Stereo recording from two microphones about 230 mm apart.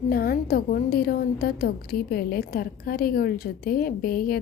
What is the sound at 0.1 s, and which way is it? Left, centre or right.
A woman's voice, left.